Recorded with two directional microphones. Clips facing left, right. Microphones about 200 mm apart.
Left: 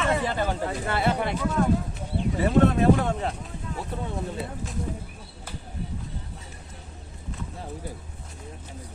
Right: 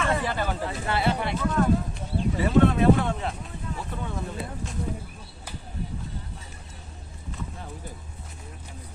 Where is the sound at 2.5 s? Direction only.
45° left (ahead or behind).